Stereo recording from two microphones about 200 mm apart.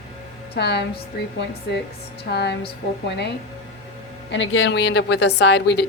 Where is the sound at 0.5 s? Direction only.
55° left (ahead or behind).